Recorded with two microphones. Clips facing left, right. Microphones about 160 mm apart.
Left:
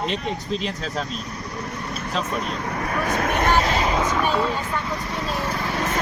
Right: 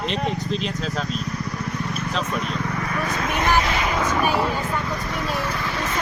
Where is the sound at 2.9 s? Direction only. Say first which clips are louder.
Left 5 dB; 45° left (ahead or behind).